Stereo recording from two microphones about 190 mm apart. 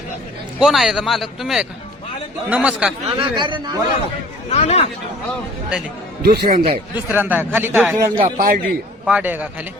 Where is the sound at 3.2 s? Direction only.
25° right (ahead or behind).